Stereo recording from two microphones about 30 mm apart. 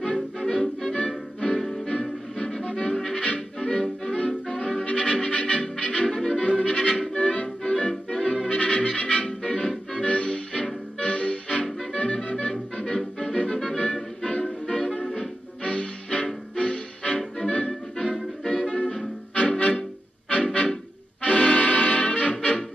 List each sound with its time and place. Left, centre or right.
0.0 s music: left
6.0 s music: left
6.4 s music: left
8.5 s music: left
10.0 s music: left
18.0 s music: left
21.2 s music: left